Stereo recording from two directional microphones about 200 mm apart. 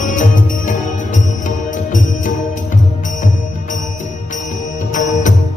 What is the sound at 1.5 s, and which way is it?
Music, 40° left (ahead or behind).